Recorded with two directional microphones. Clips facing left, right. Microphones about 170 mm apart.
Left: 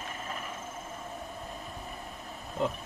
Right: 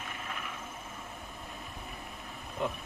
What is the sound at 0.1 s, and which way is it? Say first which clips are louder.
Vehicle: left 2 dB; 40° left (ahead or behind).